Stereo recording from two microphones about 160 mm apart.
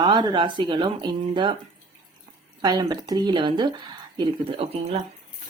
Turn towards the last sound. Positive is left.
turn(degrees=-35)  # may be behind; listen again after turning